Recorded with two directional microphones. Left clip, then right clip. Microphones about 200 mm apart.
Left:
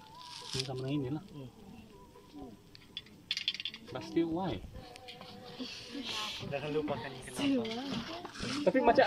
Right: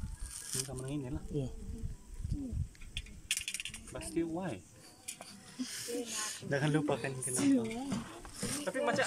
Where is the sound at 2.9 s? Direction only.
70° right (ahead or behind).